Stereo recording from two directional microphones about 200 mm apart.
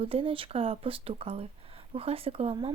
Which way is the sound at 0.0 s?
30° right (ahead or behind).